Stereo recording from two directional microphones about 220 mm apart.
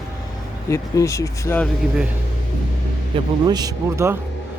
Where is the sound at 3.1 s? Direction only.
25° right (ahead or behind).